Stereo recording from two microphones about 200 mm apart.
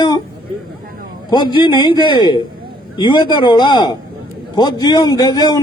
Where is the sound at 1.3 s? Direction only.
25° left (ahead or behind).